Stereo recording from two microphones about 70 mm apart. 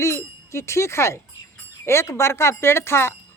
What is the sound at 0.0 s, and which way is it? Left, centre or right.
Speech, left.